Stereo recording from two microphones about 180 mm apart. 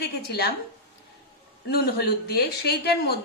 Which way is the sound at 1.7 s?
60° left (ahead or behind).